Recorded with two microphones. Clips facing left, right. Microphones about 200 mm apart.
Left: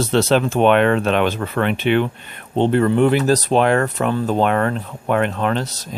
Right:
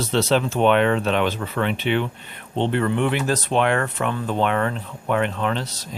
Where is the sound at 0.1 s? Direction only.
55° left (ahead or behind).